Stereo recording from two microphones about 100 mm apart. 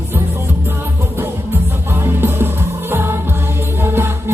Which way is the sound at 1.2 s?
25° right (ahead or behind).